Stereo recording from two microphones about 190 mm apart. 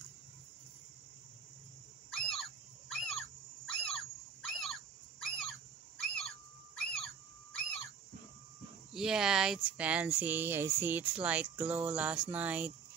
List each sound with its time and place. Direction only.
2.0 s squeak: 5° left (ahead or behind)
4.5 s fowl: centre (ahead or behind)
5.2 s a sound: 5° left (ahead or behind)
8.9 s speech: 5° right (ahead or behind)